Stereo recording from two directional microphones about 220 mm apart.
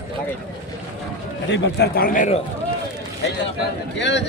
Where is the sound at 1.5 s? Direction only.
50° left (ahead or behind).